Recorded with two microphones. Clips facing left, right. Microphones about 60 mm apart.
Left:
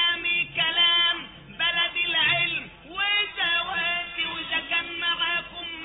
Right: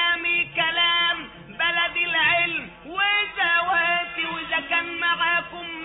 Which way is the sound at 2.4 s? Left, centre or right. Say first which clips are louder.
Right 3 dB; right.